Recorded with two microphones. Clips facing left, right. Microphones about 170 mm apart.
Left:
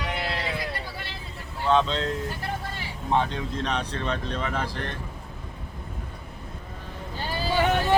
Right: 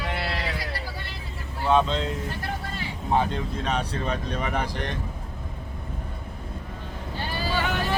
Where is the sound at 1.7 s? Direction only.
5° right (ahead or behind).